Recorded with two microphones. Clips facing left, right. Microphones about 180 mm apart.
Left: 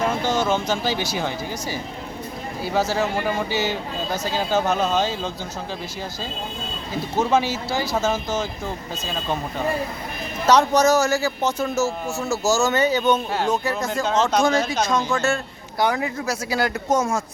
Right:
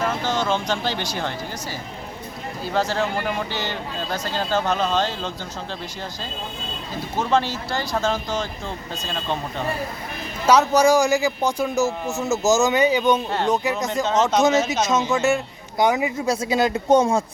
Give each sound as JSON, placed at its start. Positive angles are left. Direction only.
{"t": 0.3, "sound": "speech", "side_deg": 10}
{"t": 2.7, "sound": "speech", "side_deg": 5}
{"t": 7.2, "sound": "speech", "side_deg": 5}
{"t": 10.4, "sound": "a man's voice", "side_deg": -10}
{"t": 13.8, "sound": "speech", "side_deg": 0}
{"t": 14.7, "sound": "a man's voice", "side_deg": -20}
{"t": 16.9, "sound": "speech", "side_deg": -30}